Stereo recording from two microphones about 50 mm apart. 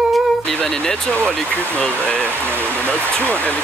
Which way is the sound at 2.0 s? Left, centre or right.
Left.